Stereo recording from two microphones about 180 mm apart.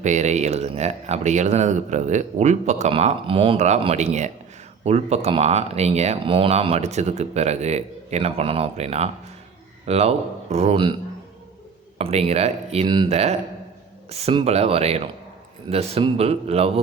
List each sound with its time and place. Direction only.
0.0 s speech: 40° right (ahead or behind)
11.9 s speech: 35° right (ahead or behind)